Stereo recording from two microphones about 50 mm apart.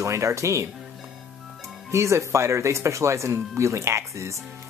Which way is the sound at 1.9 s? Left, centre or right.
Right.